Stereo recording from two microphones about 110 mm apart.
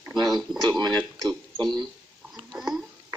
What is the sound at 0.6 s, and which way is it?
Speech, 40° right (ahead or behind).